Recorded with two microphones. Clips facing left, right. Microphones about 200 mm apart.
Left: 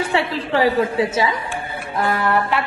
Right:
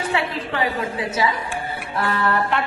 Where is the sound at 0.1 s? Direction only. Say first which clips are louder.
Left 4 dB; 30° left (ahead or behind).